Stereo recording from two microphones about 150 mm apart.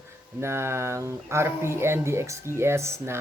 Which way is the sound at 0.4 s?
15° right (ahead or behind).